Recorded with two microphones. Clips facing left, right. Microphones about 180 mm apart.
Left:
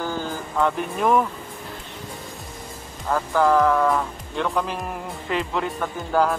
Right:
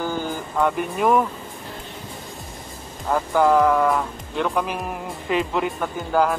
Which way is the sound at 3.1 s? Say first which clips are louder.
Right 1 dB; 10° right (ahead or behind).